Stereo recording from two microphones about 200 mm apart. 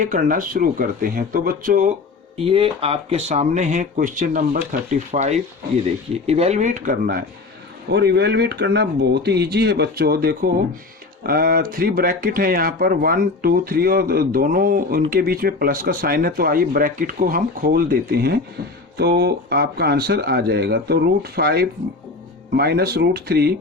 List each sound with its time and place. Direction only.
0.0 s speech: 40° right (ahead or behind)
2.4 s speech: 30° right (ahead or behind); by 7.3 s 45° right (ahead or behind)
7.9 s speech: 55° right (ahead or behind)